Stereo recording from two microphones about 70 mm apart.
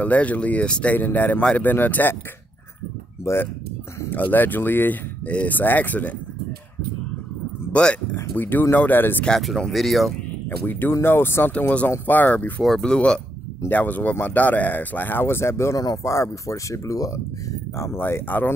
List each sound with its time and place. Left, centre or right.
0.0 s speech: left
0.9 s speech: left
3.3 s speech: left
4.1 s speech: left
7.7 s speech: centre
9.4 s speech: centre
10.6 s speech: left
11.5 s speech: centre
12.6 s speech: centre
13.7 s speech: left
17.7 s speech: left